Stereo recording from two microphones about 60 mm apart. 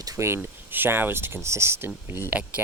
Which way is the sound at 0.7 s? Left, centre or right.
Right.